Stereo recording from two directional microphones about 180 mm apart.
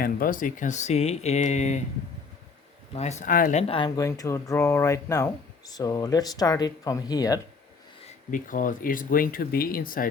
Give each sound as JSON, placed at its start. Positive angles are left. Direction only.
{"t": 0.0, "sound": "speech", "side_deg": 50}
{"t": 2.9, "sound": "speech", "side_deg": 40}
{"t": 3.6, "sound": "speech", "side_deg": 30}
{"t": 8.0, "sound": "speech", "side_deg": 50}